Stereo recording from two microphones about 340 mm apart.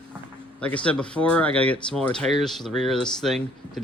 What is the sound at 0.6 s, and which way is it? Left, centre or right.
Speech, centre.